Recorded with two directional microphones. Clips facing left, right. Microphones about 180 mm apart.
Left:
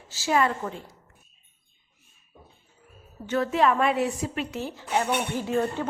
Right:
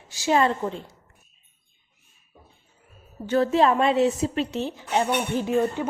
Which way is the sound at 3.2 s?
30° right (ahead or behind).